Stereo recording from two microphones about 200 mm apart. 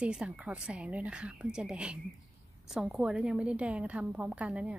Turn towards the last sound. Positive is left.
turn(degrees=-5)  # may be behind; listen again after turning